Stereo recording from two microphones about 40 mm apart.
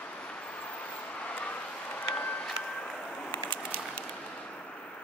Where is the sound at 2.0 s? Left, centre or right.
Left.